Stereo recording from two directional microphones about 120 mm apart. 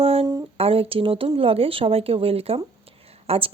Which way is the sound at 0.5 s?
55° right (ahead or behind).